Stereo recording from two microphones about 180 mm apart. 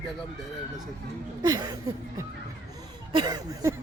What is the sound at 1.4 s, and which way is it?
Speech, 20° right (ahead or behind).